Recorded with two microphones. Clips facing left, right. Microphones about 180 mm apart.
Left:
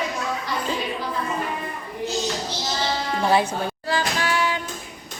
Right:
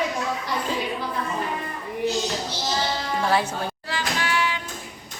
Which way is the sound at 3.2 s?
15° left (ahead or behind).